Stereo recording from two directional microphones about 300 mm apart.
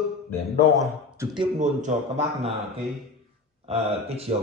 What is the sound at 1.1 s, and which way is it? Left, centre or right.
A man's voice, centre.